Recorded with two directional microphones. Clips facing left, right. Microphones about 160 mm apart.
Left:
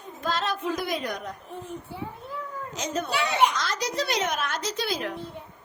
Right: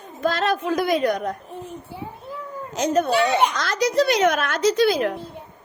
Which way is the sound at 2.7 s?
60° right (ahead or behind).